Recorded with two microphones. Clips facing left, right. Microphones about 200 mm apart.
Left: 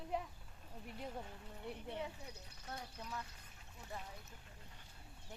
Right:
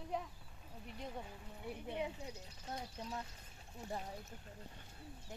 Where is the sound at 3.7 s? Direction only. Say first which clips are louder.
Right 6 dB; 35° right (ahead or behind).